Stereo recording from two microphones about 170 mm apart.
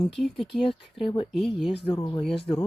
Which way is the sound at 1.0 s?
35° left (ahead or behind).